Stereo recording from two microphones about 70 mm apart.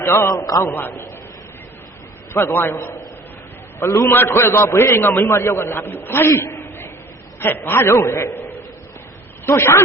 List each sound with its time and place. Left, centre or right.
0.0 s a man's voice: left
0.3 s a man's voice: left
0.6 s a man's voice: left
2.3 s a man's voice: left
4.1 s a man's voice: left
8.3 s a sound: left
9.5 s a man's voice: left